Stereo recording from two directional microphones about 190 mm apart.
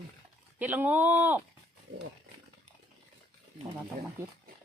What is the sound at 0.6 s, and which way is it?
Speech, 10° right (ahead or behind).